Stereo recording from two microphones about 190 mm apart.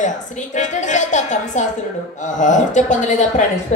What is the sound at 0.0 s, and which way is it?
A woman's voice, 40° left (ahead or behind).